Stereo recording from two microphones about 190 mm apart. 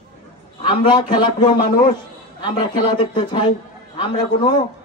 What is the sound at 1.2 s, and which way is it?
A man's voice, 25° left (ahead or behind).